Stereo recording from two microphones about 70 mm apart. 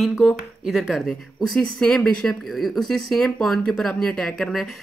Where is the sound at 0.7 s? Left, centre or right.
Centre.